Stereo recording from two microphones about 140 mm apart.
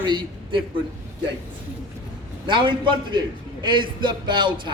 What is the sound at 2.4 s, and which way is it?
A man's voice, 35° right (ahead or behind).